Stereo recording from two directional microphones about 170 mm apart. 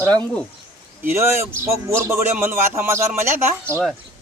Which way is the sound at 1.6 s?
15° right (ahead or behind).